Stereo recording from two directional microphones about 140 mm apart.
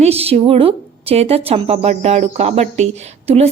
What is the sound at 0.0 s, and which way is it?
A woman's voice, 45° right (ahead or behind).